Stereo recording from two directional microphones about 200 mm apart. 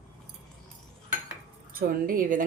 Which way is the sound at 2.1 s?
45° right (ahead or behind).